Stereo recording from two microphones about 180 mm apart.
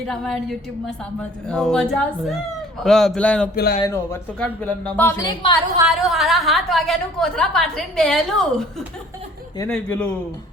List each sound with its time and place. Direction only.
0.1 s a woman's voice: centre (ahead or behind)
3.5 s speech: 55° left (ahead or behind)
3.8 s speech: 15° left (ahead or behind)
5.9 s a woman's voice: centre (ahead or behind)
9.6 s speech: 10° left (ahead or behind)